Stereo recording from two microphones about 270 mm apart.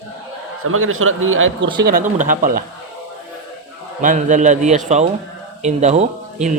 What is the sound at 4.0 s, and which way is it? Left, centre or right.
A man's voice, right.